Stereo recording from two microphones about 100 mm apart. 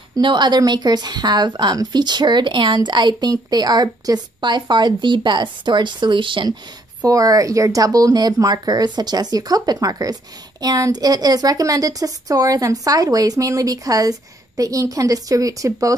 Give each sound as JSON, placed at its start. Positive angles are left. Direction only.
{"t": 0.2, "sound": "a woman's voice", "side_deg": -50}
{"t": 7.1, "sound": "a woman's voice", "side_deg": -35}